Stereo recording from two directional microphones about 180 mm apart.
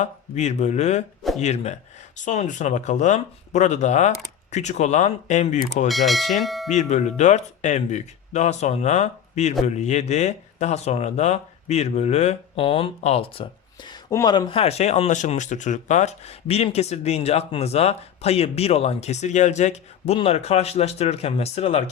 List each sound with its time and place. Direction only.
0.0 s speech: 40° left (ahead or behind)
5.9 s speech: centre (ahead or behind)
6.7 s speech: 40° left (ahead or behind)